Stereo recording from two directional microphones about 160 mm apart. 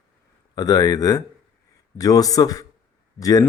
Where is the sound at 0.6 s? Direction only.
25° left (ahead or behind).